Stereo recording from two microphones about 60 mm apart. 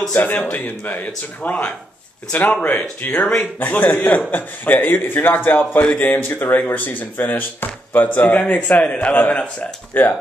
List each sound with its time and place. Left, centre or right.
0.1 s speech: left
3.1 s speech: centre
3.3 s speech: left